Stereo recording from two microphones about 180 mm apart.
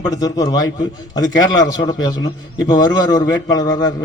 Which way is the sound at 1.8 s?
25° left (ahead or behind).